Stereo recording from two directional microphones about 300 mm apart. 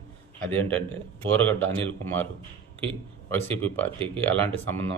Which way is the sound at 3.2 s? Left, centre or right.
Centre.